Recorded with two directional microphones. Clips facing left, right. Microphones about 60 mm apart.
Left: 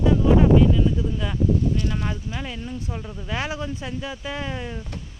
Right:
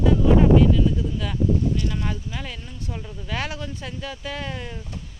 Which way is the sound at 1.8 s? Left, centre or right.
Centre.